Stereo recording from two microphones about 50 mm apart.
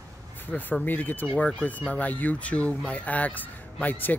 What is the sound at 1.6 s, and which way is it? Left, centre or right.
Speech, left.